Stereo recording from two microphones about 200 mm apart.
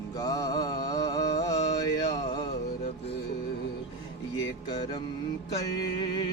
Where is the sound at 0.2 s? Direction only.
20° left (ahead or behind).